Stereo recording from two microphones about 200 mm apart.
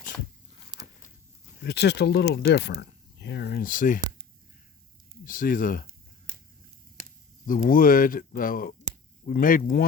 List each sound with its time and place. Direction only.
0.7 s a sound: 20° right (ahead or behind)
1.6 s speech: 55° left (ahead or behind)
5.2 s speech: 45° left (ahead or behind)
7.4 s speech: 40° left (ahead or behind)